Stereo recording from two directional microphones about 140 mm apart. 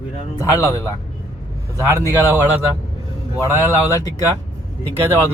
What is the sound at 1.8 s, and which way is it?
Speech, 20° right (ahead or behind).